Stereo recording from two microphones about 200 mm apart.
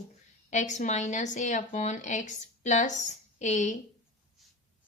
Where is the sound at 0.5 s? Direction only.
35° left (ahead or behind).